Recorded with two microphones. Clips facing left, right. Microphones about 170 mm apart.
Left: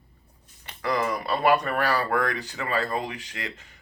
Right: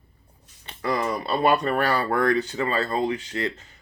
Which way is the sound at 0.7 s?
25° right (ahead or behind).